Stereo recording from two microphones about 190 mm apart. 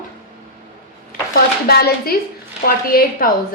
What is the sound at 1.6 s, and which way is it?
A woman's voice, 55° left (ahead or behind).